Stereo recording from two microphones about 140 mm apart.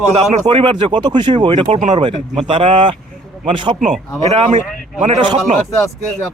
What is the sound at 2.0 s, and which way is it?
Speech, 40° right (ahead or behind).